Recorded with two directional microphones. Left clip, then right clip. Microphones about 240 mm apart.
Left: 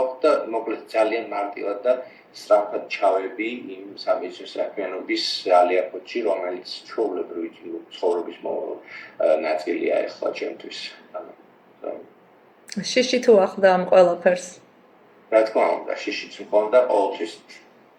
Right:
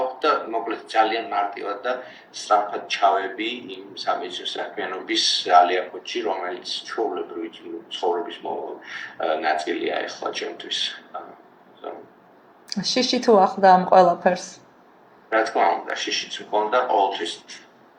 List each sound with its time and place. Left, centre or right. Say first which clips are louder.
0.0 s a man's voice: left 2 dB; centre
8.9 s a man's voice: left 5 dB; centre
12.8 s speech: left 2 dB; right
15.3 s a man's voice: left 1 dB; centre